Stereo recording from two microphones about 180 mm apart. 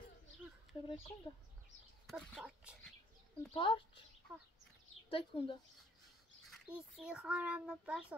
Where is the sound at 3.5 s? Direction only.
25° left (ahead or behind).